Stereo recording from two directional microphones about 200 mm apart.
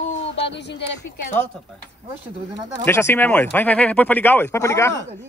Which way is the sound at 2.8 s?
10° left (ahead or behind).